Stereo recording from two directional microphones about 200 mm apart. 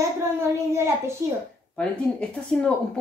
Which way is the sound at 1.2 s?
15° right (ahead or behind).